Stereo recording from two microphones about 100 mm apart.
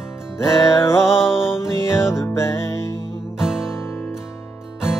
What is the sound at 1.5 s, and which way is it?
Music, 30° left (ahead or behind).